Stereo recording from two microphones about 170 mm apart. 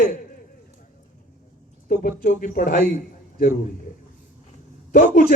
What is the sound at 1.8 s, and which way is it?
A man's voice, 60° left (ahead or behind).